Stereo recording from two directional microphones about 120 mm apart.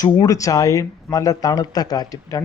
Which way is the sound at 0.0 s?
30° left (ahead or behind).